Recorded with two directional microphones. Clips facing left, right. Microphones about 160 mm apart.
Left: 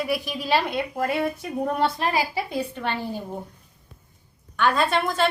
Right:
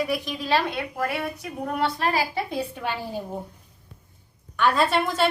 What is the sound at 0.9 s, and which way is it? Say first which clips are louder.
Speech: left 5 dB; 25° left (ahead or behind).